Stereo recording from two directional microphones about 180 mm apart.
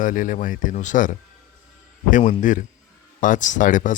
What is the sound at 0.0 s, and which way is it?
Speech, 45° left (ahead or behind).